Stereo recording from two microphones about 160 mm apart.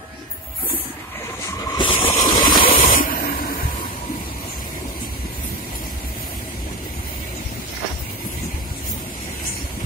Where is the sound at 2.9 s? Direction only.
60° left (ahead or behind).